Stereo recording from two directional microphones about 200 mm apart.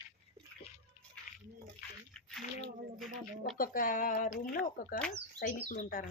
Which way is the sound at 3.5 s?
45° left (ahead or behind).